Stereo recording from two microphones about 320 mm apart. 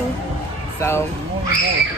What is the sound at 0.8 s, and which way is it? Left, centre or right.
Speech, centre.